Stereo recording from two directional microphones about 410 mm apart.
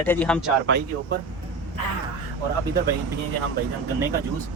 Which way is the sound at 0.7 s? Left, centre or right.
Right.